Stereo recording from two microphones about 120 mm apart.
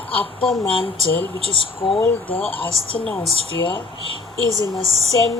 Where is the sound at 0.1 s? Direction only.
50° left (ahead or behind).